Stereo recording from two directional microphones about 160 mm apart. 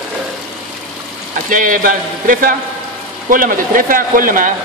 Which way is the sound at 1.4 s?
55° right (ahead or behind).